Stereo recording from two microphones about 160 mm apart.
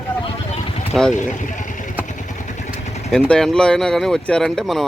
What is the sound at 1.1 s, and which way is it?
Speech, 50° left (ahead or behind).